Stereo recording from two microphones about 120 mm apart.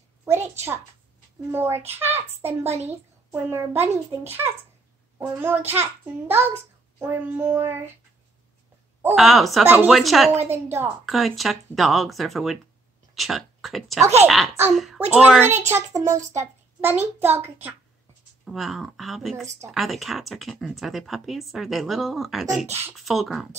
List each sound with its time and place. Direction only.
0.2 s a sound: 20° right (ahead or behind)
1.5 s a child's voice: 20° right (ahead or behind)
9.1 s speech: centre (ahead or behind)
10.4 s a child's voice: 20° right (ahead or behind)
11.1 s a child's voice: centre (ahead or behind)
15.7 s a child's voice: 25° right (ahead or behind)
18.4 s speech: centre (ahead or behind)
22.7 s a child's voice: 20° right (ahead or behind)
22.9 s speech: centre (ahead or behind)